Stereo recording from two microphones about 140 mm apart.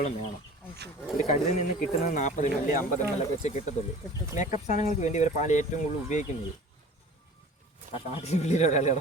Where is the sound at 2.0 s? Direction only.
60° left (ahead or behind).